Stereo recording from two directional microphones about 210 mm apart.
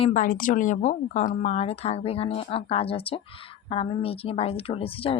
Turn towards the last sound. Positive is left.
turn(degrees=25)  # may be behind; listen again after turning